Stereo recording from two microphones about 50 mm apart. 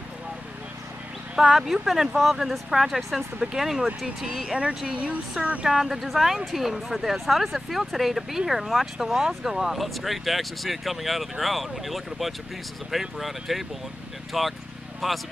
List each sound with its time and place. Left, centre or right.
1.3 s speech: centre
3.3 s speech: centre
4.6 s speech: right
5.7 s speech: centre